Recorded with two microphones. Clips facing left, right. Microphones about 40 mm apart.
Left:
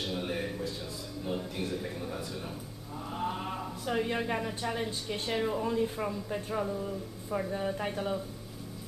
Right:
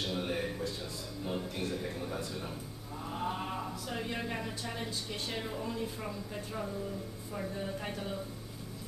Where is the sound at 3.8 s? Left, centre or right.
Centre.